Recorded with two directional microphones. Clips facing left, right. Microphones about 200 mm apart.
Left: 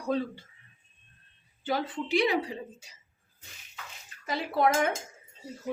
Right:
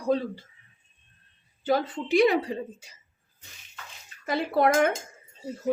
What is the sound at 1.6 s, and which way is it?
Speech, 45° right (ahead or behind).